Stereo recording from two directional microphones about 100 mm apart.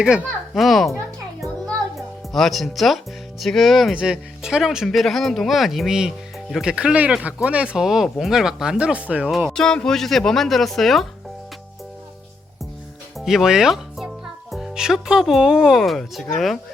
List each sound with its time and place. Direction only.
0.0 s a child's voice: 10° right (ahead or behind)
1.4 s music: centre (ahead or behind)
3.4 s speech: centre (ahead or behind)
9.5 s speech: 5° left (ahead or behind)
13.1 s speech: 5° right (ahead or behind)